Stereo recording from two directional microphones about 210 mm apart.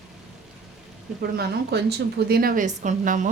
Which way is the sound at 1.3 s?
50° right (ahead or behind).